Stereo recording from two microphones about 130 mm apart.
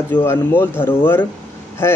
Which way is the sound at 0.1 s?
15° left (ahead or behind).